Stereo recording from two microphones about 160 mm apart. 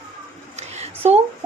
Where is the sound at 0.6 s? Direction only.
40° right (ahead or behind).